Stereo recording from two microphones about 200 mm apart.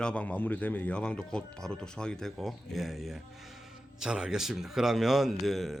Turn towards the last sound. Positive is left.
turn(degrees=0)  # may be behind; listen again after turning